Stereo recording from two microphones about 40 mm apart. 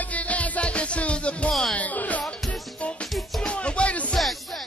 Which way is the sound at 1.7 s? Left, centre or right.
Left.